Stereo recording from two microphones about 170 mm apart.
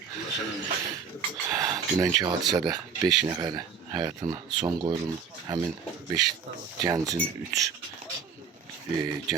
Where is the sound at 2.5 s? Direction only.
25° right (ahead or behind).